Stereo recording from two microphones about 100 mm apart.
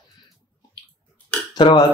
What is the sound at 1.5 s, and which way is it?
Speech, 45° left (ahead or behind).